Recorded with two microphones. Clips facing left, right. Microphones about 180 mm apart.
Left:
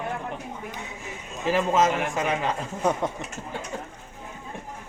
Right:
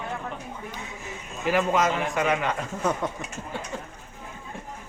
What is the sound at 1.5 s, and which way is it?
A man's voice, 30° left (ahead or behind).